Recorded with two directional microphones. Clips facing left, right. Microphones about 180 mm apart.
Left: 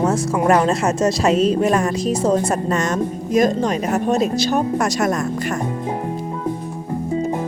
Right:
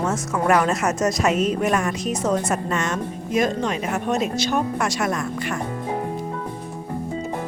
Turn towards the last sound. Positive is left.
turn(degrees=40)  # may be behind; listen again after turning